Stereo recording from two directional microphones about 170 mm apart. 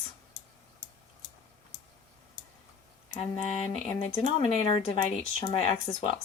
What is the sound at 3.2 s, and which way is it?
Speech, 40° left (ahead or behind).